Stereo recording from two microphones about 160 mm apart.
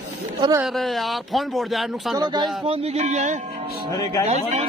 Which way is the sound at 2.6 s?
40° right (ahead or behind).